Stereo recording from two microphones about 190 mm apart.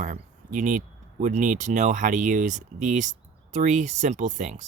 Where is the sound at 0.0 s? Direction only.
45° right (ahead or behind).